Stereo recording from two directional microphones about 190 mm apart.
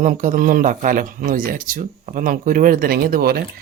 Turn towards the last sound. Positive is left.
turn(degrees=-50)  # may be behind; listen again after turning